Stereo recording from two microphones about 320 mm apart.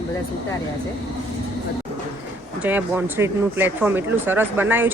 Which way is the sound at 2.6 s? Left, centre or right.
Centre.